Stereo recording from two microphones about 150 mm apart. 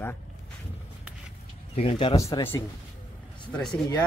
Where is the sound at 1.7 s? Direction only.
40° left (ahead or behind).